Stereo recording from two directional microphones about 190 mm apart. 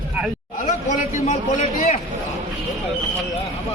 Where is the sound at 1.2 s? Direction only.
35° left (ahead or behind).